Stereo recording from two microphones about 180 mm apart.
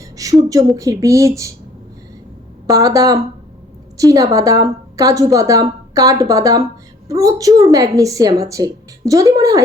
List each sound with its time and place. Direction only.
0.2 s a sound: 20° right (ahead or behind)
0.8 s a woman's voice: 20° right (ahead or behind)
2.6 s a woman's voice: 20° right (ahead or behind)